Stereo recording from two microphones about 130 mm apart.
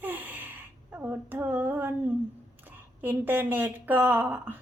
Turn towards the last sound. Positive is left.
turn(degrees=-15)  # may be behind; listen again after turning